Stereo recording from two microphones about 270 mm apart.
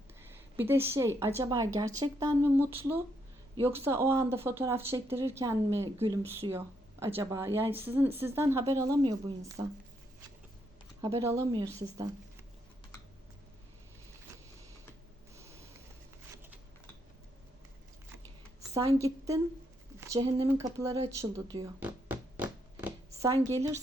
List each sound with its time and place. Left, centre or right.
0.2 s a woman's voice: centre
11.0 s a woman's voice: centre
18.7 s a woman's voice: centre
21.2 s a sound: centre
23.3 s a woman's voice: centre